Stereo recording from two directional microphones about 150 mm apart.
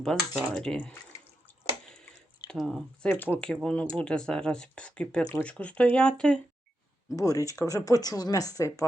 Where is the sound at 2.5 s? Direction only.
Centre (ahead or behind).